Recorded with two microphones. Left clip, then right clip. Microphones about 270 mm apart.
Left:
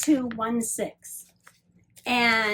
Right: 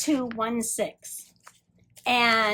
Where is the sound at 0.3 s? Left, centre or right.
Centre.